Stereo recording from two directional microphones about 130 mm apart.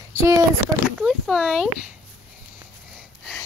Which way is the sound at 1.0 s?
5° right (ahead or behind).